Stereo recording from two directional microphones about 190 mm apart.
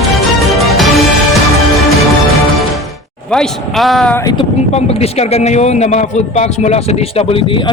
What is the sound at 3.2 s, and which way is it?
Speech, 5° left (ahead or behind).